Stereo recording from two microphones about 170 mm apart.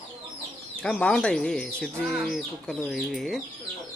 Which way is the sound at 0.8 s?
5° left (ahead or behind).